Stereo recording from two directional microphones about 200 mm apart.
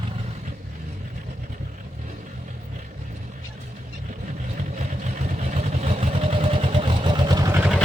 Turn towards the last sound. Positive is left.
turn(degrees=-10)  # may be behind; listen again after turning